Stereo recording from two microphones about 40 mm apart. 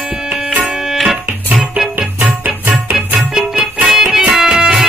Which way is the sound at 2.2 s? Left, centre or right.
Right.